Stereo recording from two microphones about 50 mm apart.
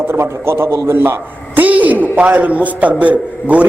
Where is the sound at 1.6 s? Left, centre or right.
Right.